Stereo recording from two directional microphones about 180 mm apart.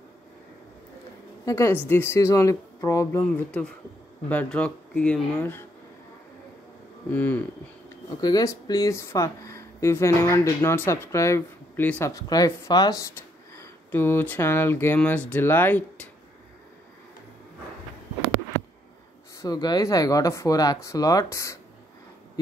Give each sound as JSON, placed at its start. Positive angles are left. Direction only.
{"t": 1.4, "sound": "a woman's voice", "side_deg": 15}
{"t": 7.1, "sound": "speech", "side_deg": 10}
{"t": 19.4, "sound": "speech", "side_deg": 20}